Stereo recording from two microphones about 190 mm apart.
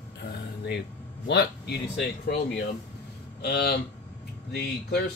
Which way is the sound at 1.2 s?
60° left (ahead or behind).